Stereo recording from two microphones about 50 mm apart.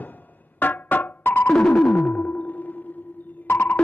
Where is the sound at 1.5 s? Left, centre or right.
Centre.